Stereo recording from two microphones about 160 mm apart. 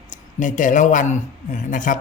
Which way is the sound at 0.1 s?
50° left (ahead or behind).